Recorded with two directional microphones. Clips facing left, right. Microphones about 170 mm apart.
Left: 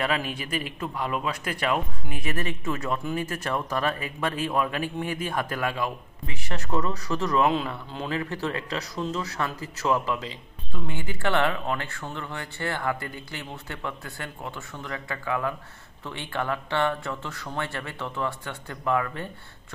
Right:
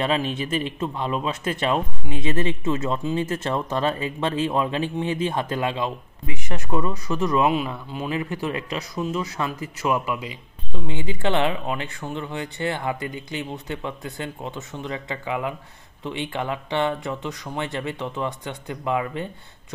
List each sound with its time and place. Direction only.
0.0 s speech: 25° right (ahead or behind)